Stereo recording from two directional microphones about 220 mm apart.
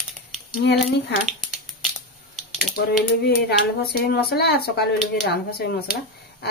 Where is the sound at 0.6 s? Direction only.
50° left (ahead or behind).